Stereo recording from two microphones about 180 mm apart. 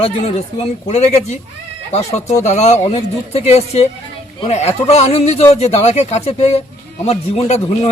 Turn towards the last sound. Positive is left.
turn(degrees=35)  # may be behind; listen again after turning